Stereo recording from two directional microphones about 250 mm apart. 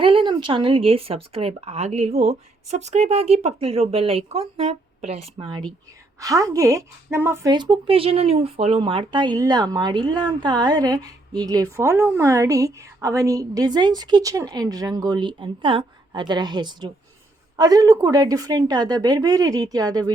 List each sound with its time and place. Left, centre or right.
0.0 s a woman's voice: right